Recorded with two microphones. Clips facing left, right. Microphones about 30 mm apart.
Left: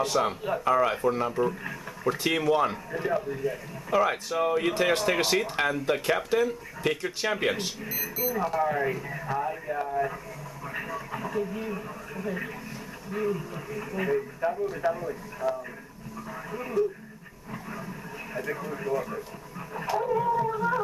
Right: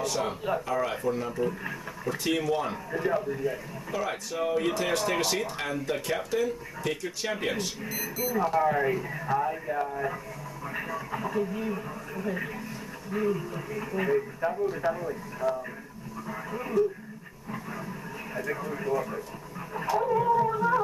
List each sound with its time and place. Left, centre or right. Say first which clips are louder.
0.1 s speech: left 2 dB; centre
2.7 s speech: even; centre
3.9 s speech: left 7 dB; centre
7.8 s speech: even; centre
17.5 s a sound: right 1 dB; centre
18.3 s speech: even; centre